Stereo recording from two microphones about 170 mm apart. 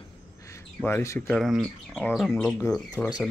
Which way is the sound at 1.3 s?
Centre (ahead or behind).